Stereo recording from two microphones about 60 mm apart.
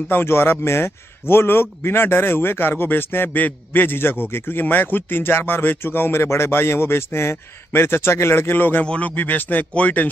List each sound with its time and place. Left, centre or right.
0.1 s a man's voice: left
8.8 s speech: left